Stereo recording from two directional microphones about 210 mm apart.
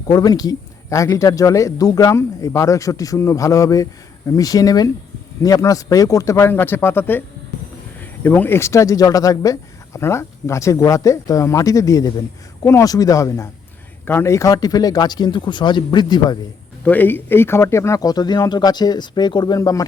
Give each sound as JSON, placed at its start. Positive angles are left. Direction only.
{"t": 0.1, "sound": "speech", "side_deg": 20}
{"t": 16.8, "sound": "speech", "side_deg": 10}